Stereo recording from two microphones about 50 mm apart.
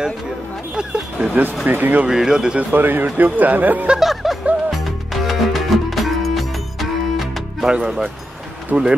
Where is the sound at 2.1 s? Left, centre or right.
Centre.